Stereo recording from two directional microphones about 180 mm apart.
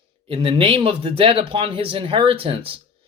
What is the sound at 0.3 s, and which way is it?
Speech, 30° right (ahead or behind).